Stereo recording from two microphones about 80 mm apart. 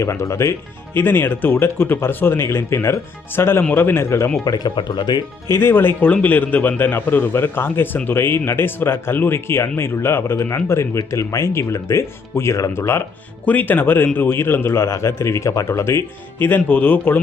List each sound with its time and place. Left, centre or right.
0.0 s speech: left
0.9 s speech: left
4.4 s speech: left
5.5 s speech: left
13.4 s speech: centre